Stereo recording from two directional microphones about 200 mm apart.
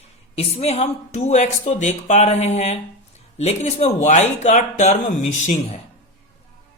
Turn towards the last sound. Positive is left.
turn(degrees=35)  # may be behind; listen again after turning